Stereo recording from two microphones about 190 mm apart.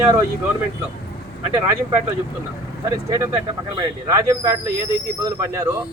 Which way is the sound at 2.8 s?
15° right (ahead or behind).